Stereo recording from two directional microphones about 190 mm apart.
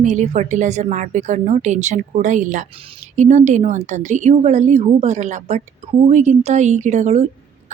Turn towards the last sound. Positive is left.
turn(degrees=-35)  # may be behind; listen again after turning